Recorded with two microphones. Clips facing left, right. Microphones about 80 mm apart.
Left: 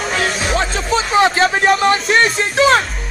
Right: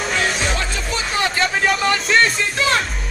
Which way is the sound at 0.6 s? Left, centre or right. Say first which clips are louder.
Left 7 dB; left.